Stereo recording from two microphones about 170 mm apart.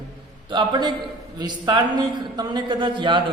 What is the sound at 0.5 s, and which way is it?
A man's voice, 25° right (ahead or behind).